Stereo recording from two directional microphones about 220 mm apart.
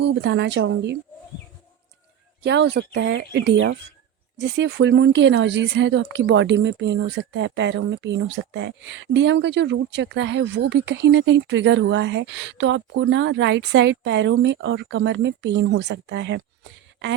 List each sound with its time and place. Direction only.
0.0 s speech: 50° right (ahead or behind)
2.4 s speech: 55° right (ahead or behind)